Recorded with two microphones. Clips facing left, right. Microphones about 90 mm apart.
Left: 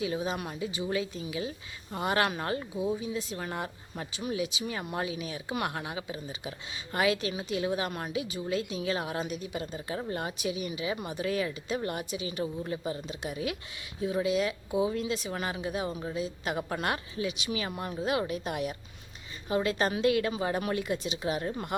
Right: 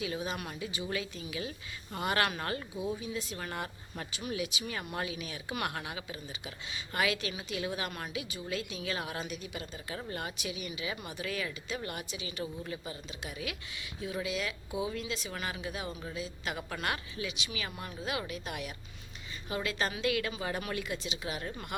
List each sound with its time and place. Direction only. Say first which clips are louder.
0.0 s speech: left 4 dB; 25° left (ahead or behind)
3.3 s speech: left 3 dB; 15° left (ahead or behind)
4.2 s speech: left 4 dB; 30° left (ahead or behind)
15.3 s speech: left 5 dB; 30° left (ahead or behind)